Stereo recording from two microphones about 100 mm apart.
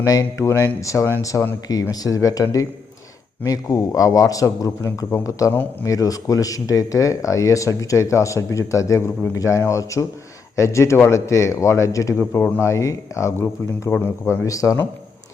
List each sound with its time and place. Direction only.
0.0 s a man's voice: 35° left (ahead or behind)